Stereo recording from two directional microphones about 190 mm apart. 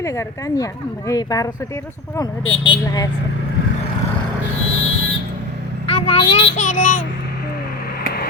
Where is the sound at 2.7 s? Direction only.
20° left (ahead or behind).